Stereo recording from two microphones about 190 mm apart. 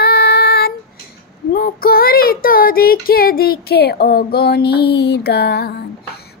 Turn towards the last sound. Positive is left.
turn(degrees=55)  # may be behind; listen again after turning